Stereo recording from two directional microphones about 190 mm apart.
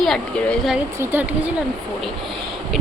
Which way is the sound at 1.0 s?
10° right (ahead or behind).